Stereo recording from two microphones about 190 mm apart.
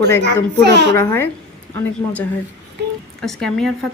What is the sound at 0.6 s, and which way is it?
Speech, 65° right (ahead or behind).